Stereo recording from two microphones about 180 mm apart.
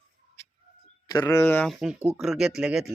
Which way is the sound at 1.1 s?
20° left (ahead or behind).